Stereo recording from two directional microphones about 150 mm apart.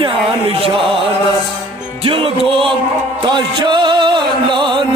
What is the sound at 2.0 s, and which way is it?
Speech, 35° right (ahead or behind).